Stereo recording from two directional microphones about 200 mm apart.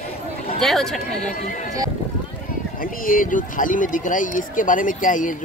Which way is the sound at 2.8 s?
45° left (ahead or behind).